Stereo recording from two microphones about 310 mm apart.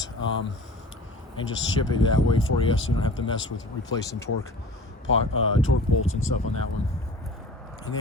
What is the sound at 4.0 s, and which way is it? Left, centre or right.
Speech, centre.